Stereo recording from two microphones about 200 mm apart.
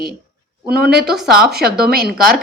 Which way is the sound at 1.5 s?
50° right (ahead or behind).